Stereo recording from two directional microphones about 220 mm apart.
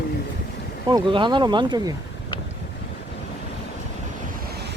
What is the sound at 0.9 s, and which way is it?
Speech, 20° right (ahead or behind).